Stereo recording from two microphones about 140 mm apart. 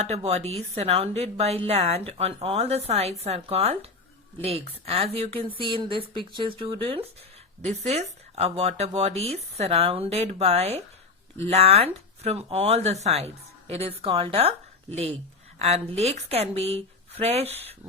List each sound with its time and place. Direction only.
0.0 s speech: 50° right (ahead or behind)
15.5 s speech: 50° right (ahead or behind)